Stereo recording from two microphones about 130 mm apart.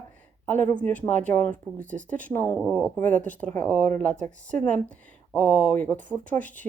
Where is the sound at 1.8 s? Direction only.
80° right.